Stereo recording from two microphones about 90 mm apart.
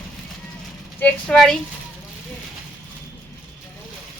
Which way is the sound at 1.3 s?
5° left (ahead or behind).